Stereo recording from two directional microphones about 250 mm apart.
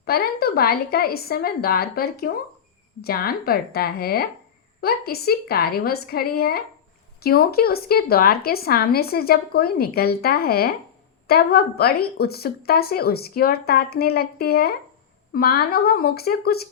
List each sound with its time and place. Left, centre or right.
0.0 s speech: left